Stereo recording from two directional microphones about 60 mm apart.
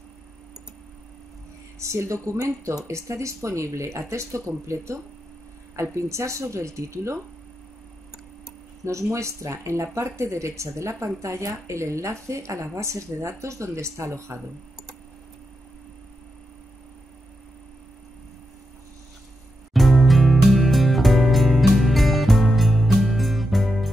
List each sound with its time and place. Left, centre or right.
1.8 s speech: right
8.8 s speech: right
19.7 s music: centre